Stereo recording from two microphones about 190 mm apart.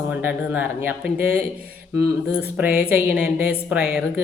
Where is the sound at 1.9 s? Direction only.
90° left.